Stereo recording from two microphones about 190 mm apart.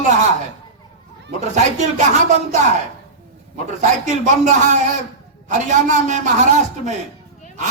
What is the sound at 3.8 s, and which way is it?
A man's voice, 40° right (ahead or behind).